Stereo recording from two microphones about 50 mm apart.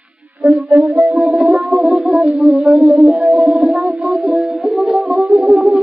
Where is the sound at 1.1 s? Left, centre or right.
Centre.